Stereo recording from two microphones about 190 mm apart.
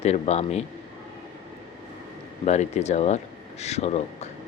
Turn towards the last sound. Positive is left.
turn(degrees=35)  # may be behind; listen again after turning